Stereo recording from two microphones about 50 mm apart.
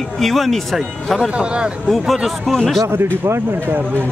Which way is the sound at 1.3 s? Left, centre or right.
Centre.